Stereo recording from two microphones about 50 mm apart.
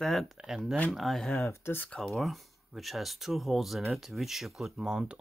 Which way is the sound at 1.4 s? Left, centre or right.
Left.